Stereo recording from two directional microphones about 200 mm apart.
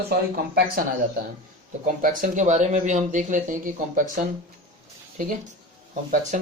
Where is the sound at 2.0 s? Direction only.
40° right (ahead or behind).